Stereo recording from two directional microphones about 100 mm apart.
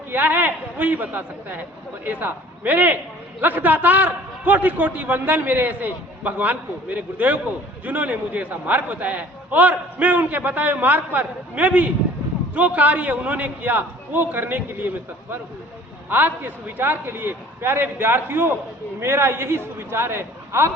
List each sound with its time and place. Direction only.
0.1 s a man's voice: 15° right (ahead or behind)